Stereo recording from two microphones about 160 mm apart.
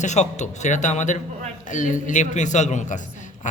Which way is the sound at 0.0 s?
45° left (ahead or behind).